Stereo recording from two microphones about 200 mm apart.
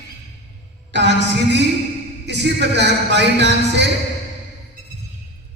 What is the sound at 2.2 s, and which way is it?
Speech, 60° right (ahead or behind).